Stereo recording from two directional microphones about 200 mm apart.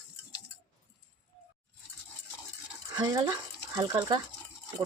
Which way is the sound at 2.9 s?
20° right (ahead or behind).